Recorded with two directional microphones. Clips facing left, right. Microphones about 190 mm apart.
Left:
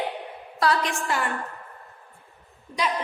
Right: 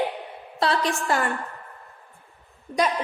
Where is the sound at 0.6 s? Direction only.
30° right (ahead or behind).